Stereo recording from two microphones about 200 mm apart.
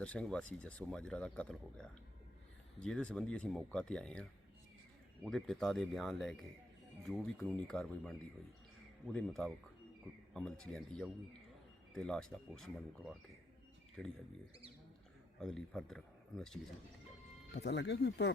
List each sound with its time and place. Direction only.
0.0 s speech: 5° left (ahead or behind)
15.4 s speech: centre (ahead or behind)
17.6 s speech: 60° left (ahead or behind)